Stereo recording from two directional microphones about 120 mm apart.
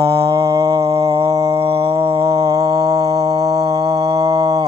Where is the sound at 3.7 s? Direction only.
30° right (ahead or behind).